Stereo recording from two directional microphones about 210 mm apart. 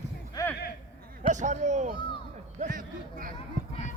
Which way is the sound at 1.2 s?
35° right (ahead or behind).